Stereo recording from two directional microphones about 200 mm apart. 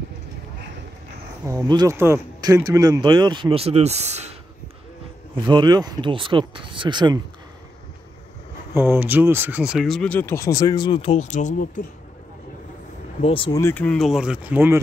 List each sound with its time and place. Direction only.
1.4 s speech: 15° right (ahead or behind); by 4.4 s 35° right (ahead or behind)
5.5 s speech: 20° right (ahead or behind)
8.7 s speech: 10° right (ahead or behind); by 11.8 s 35° left (ahead or behind)
13.2 s speech: 25° left (ahead or behind)
13.6 s speech: 10° left (ahead or behind); by 14.8 s 10° right (ahead or behind)